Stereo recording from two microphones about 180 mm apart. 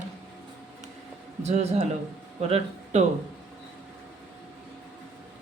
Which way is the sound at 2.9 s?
40° right (ahead or behind).